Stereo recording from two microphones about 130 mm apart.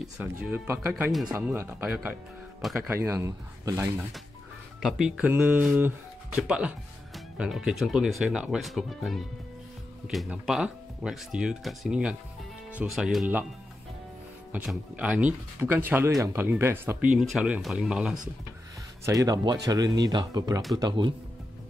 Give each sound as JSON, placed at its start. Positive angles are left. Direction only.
{"t": 0.2, "sound": "speech", "side_deg": -15}
{"t": 2.9, "sound": "speech", "side_deg": -20}
{"t": 4.8, "sound": "speech", "side_deg": -5}
{"t": 14.5, "sound": "speech", "side_deg": -10}
{"t": 19.0, "sound": "speech", "side_deg": -30}